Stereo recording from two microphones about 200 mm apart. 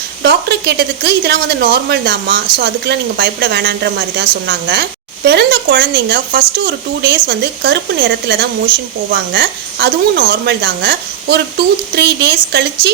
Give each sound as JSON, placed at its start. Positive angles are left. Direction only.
{"t": 0.2, "sound": "speech", "side_deg": -55}